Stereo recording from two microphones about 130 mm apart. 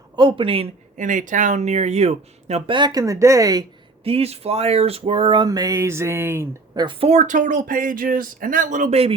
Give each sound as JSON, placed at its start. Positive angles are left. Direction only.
{"t": 0.2, "sound": "speech", "side_deg": -40}
{"t": 0.9, "sound": "speech", "side_deg": -80}
{"t": 2.6, "sound": "speech", "side_deg": -35}
{"t": 4.0, "sound": "speech", "side_deg": -50}
{"t": 6.7, "sound": "speech", "side_deg": -40}
{"t": 7.1, "sound": "speech", "side_deg": -70}